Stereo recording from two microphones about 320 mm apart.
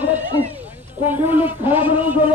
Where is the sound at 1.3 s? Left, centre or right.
Centre.